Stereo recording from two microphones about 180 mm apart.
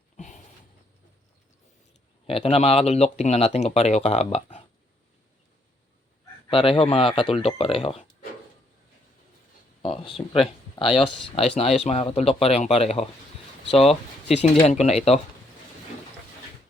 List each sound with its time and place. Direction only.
0.2 s a sound: 45° left (ahead or behind)
2.2 s speech: 30° left (ahead or behind)
6.5 s speech: 30° left (ahead or behind)
9.8 s speech: 30° left (ahead or behind)